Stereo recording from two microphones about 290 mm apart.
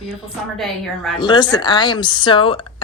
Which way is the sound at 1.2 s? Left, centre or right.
Centre.